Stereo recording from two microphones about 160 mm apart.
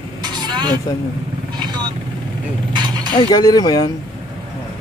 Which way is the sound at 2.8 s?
25° right (ahead or behind).